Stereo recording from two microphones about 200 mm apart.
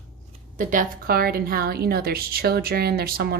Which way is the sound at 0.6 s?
40° right (ahead or behind).